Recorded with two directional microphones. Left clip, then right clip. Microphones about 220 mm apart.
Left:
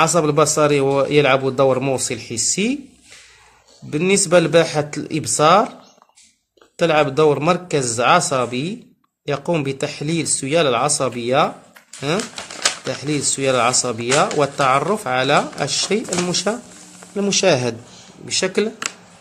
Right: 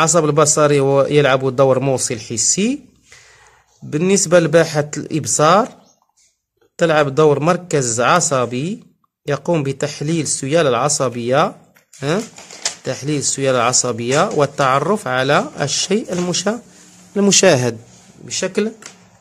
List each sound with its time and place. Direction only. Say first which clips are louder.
0.0 s speech: right 2 dB; 25° right (ahead or behind)
3.9 s speech: right 2 dB; 25° right (ahead or behind)
6.8 s speech: right 2 dB; 20° right (ahead or behind)
17.1 s speech: right 4 dB; 35° right (ahead or behind)
18.3 s speech: left 1 dB; 15° right (ahead or behind)